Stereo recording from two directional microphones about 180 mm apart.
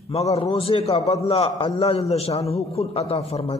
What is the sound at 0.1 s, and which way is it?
A man's voice, 35° left (ahead or behind).